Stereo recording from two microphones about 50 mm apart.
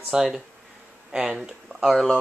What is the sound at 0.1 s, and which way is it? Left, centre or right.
Speech, centre.